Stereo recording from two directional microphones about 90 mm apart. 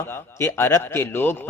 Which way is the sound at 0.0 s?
25° left (ahead or behind).